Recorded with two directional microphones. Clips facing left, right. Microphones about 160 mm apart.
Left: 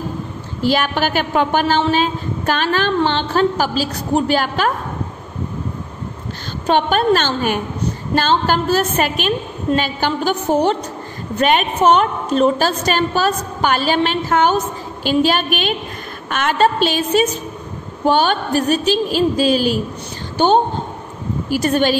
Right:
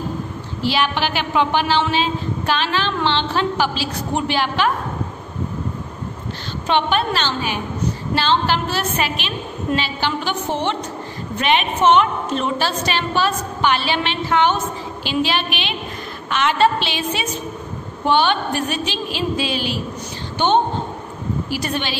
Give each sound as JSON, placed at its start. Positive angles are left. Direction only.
{"t": 0.6, "sound": "a woman's voice", "side_deg": 45}
{"t": 6.7, "sound": "a woman's voice", "side_deg": 45}